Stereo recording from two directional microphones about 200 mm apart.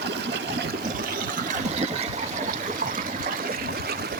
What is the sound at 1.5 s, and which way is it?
Water, 35° right (ahead or behind).